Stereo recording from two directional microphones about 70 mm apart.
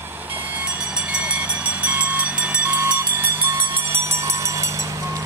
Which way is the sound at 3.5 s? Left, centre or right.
Right.